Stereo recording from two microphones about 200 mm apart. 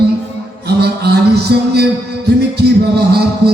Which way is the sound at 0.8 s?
55° right (ahead or behind).